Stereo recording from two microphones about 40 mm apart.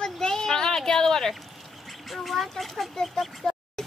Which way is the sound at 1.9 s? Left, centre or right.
Centre.